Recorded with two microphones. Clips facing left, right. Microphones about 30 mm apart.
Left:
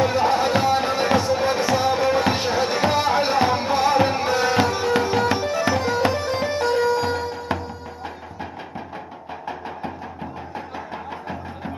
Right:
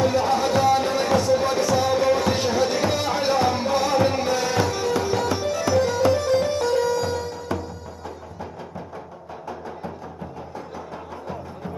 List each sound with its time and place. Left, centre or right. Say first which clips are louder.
0.0 s music: left 1 dB; centre